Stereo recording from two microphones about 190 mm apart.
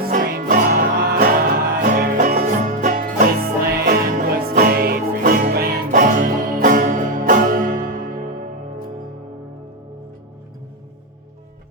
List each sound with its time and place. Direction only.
0.0 s music: 50° right (ahead or behind)